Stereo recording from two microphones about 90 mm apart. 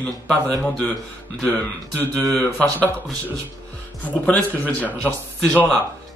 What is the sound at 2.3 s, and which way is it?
Speech, 20° left (ahead or behind).